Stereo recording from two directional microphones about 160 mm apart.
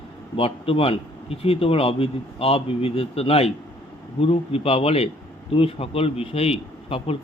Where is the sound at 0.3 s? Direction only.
35° left (ahead or behind).